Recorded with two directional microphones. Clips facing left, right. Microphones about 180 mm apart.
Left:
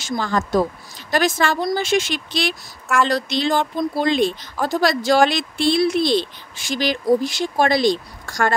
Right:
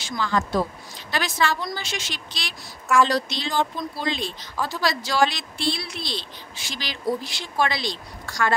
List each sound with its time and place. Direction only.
0.0 s speech: 45° left (ahead or behind)